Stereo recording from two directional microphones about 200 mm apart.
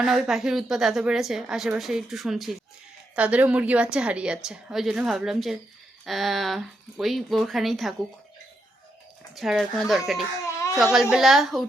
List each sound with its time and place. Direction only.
0.0 s a woman's voice: centre (ahead or behind)
9.3 s a woman's voice: centre (ahead or behind)
10.4 s baby cry: 15° left (ahead or behind)
10.9 s a woman's voice: centre (ahead or behind)